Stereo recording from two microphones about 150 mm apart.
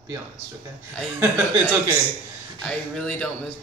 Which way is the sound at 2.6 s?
5° left (ahead or behind).